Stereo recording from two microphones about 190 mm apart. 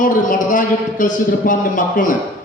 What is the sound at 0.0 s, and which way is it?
A man's voice, 45° left (ahead or behind).